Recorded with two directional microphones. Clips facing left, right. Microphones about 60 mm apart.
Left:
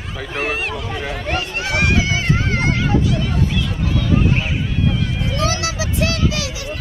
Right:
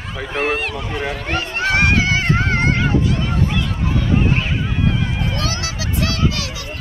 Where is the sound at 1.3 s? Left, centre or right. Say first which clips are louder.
Right 3 dB; right.